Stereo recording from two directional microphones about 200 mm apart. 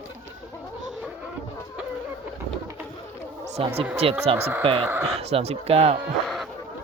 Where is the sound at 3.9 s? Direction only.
30° right (ahead or behind).